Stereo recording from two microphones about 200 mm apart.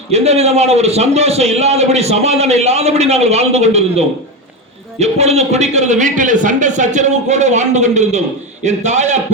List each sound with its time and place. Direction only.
0.1 s a man's voice: 30° right (ahead or behind)